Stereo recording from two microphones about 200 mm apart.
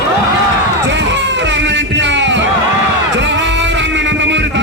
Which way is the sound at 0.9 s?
65° right (ahead or behind).